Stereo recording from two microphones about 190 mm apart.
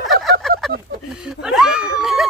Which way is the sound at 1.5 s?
5° right (ahead or behind).